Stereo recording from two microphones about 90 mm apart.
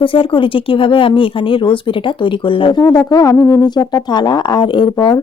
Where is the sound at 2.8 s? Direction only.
45° left (ahead or behind).